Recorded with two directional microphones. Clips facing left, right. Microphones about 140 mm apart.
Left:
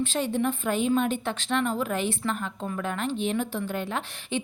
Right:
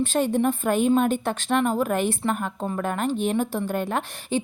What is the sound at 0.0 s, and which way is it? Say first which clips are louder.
A woman's voice: right 4 dB; 45° right (ahead or behind).